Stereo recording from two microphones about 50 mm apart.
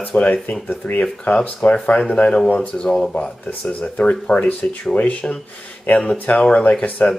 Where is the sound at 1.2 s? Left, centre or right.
Left.